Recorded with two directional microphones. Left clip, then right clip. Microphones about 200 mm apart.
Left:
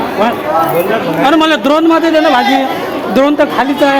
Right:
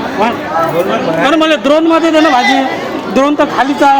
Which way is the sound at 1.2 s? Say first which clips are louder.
Left 1 dB; 15° left (ahead or behind).